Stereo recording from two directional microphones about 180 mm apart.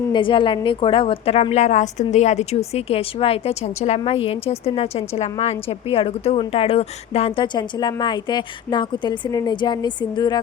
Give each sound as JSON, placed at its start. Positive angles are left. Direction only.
{"t": 0.1, "sound": "a woman's voice", "side_deg": 25}